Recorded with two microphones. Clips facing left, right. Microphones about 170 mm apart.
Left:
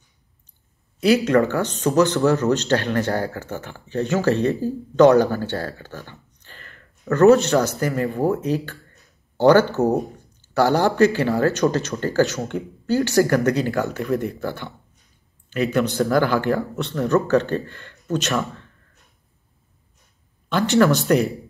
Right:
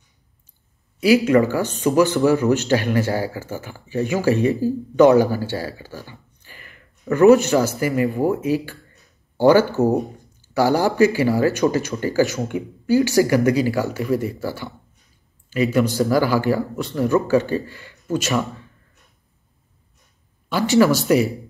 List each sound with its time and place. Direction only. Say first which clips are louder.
1.0 s speech: right 2 dB; 5° right (ahead or behind)
20.4 s speech: right 1 dB; 5° right (ahead or behind)